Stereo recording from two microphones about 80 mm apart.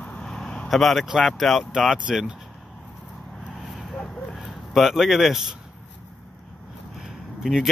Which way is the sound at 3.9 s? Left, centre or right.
Centre.